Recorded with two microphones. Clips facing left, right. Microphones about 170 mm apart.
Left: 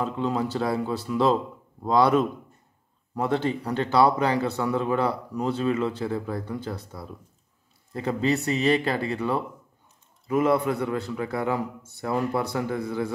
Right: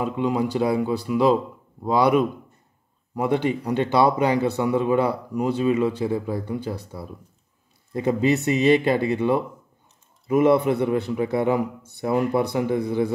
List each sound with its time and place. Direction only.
0.0 s a man's voice: 15° right (ahead or behind)